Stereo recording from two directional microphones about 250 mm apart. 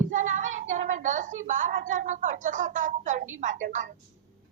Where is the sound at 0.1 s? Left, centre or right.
Right.